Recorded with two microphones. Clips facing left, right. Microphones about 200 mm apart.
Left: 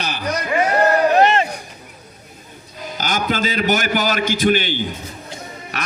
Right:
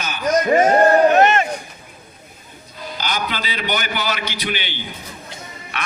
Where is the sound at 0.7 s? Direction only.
30° right (ahead or behind).